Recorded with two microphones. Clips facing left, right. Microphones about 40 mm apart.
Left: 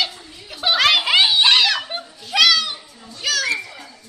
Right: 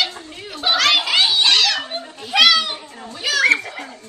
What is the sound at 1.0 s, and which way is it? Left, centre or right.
Snicker, centre.